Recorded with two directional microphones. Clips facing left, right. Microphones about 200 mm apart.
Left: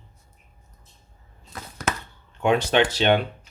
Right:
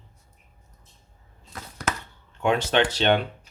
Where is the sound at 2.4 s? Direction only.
15° left (ahead or behind).